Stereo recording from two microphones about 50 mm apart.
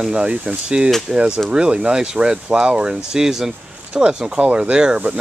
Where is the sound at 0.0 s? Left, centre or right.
Centre.